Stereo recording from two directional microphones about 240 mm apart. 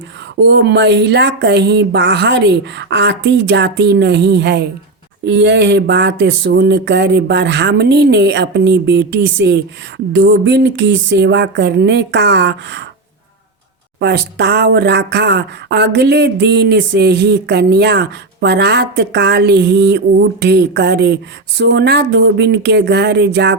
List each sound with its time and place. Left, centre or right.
0.4 s speech: right
14.0 s speech: right